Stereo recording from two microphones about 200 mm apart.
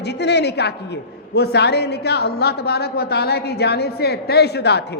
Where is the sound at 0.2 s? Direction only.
60° left (ahead or behind).